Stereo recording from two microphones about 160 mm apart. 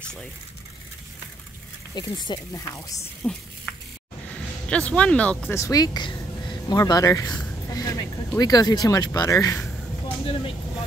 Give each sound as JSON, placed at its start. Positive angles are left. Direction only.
{"t": 2.0, "sound": "speech", "side_deg": 25}
{"t": 3.2, "sound": "speech", "side_deg": 10}
{"t": 3.7, "sound": "a sound", "side_deg": 10}
{"t": 4.3, "sound": "speech", "side_deg": 5}
{"t": 10.0, "sound": "vehicle", "side_deg": 35}